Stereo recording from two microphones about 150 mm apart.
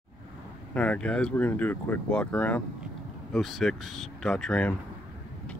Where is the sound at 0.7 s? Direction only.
10° left (ahead or behind).